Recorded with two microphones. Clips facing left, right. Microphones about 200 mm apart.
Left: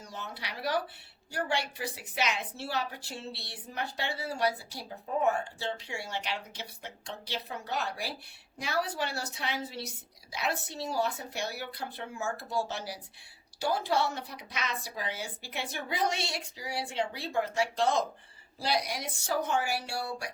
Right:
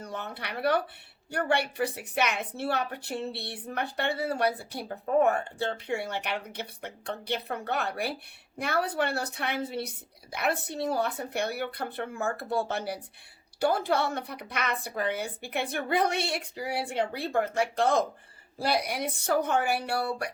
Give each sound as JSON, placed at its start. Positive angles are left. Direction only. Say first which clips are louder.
{"t": 0.0, "sound": "a woman's voice", "louder": "right 5 dB", "side_deg": -60}